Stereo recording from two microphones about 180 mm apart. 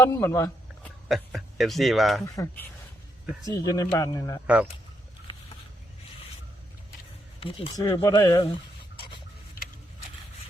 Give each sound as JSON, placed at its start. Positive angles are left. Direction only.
{"t": 0.0, "sound": "a sound", "side_deg": 15}
{"t": 1.0, "sound": "a man's voice", "side_deg": 0}
{"t": 2.2, "sound": "speech", "side_deg": 20}
{"t": 7.3, "sound": "speech", "side_deg": 30}
{"t": 9.0, "sound": "rub", "side_deg": 30}